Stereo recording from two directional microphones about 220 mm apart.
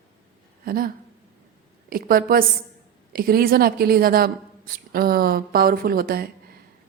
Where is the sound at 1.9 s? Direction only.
40° right (ahead or behind).